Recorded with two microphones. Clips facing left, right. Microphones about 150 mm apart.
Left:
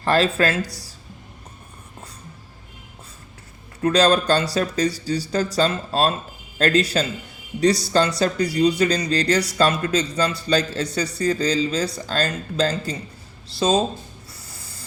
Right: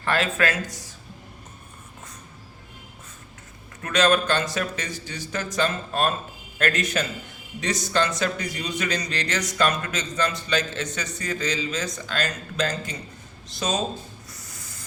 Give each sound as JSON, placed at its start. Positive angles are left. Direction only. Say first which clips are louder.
{"t": 0.0, "sound": "speech", "louder": "left 5 dB", "side_deg": 35}
{"t": 3.8, "sound": "speech", "louder": "left 4 dB", "side_deg": 35}
{"t": 14.4, "sound": "a sound", "louder": "left 1 dB", "side_deg": 30}